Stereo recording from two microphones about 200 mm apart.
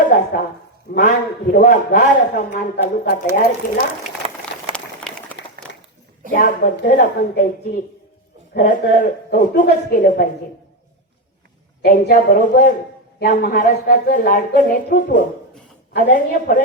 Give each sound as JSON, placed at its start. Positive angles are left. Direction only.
{"t": 0.0, "sound": "a man's voice", "side_deg": 40}
{"t": 4.7, "sound": "a sound", "side_deg": 5}
{"t": 6.3, "sound": "a man's voice", "side_deg": 45}
{"t": 11.8, "sound": "a man's voice", "side_deg": 50}